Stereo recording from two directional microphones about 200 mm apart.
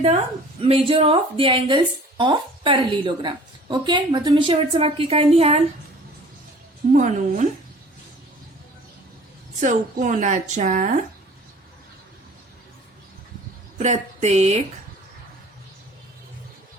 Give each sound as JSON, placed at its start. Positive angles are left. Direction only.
{"t": 0.6, "sound": "a woman's voice", "side_deg": -30}
{"t": 6.9, "sound": "speech", "side_deg": -35}
{"t": 9.6, "sound": "speech", "side_deg": -40}
{"t": 13.7, "sound": "speech", "side_deg": -35}